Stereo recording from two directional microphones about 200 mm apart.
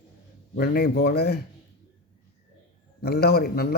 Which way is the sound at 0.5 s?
50° left (ahead or behind).